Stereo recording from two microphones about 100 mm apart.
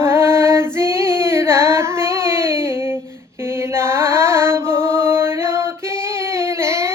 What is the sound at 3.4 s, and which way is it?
Mantra, 25° right (ahead or behind).